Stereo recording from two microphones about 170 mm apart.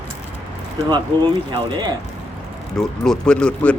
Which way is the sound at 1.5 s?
25° right (ahead or behind).